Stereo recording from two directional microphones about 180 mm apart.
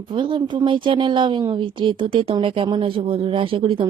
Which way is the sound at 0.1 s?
25° right (ahead or behind).